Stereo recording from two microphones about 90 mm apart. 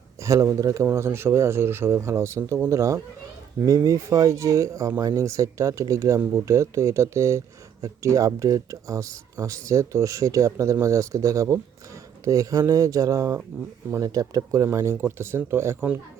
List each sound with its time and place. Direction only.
0.2 s speech: 35° right (ahead or behind)